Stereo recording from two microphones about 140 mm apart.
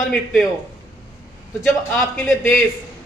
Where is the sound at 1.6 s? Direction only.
Centre (ahead or behind).